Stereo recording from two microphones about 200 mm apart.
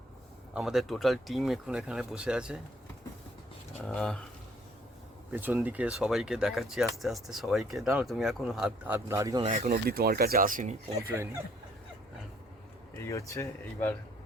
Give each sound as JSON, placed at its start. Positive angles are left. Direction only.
{"t": 0.5, "sound": "speech", "side_deg": 0}
{"t": 3.8, "sound": "speech", "side_deg": 5}
{"t": 5.3, "sound": "speech", "side_deg": -10}
{"t": 9.5, "sound": "speech", "side_deg": -45}
{"t": 11.1, "sound": "speech", "side_deg": -15}
{"t": 13.0, "sound": "speech", "side_deg": 15}